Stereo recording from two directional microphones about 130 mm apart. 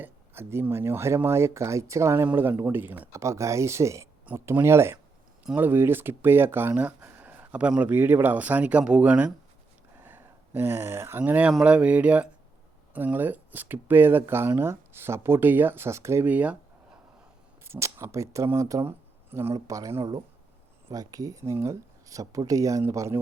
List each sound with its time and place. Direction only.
0.0 s speech: 15° right (ahead or behind)
17.7 s speech: 20° right (ahead or behind)
20.0 s speech: 35° right (ahead or behind)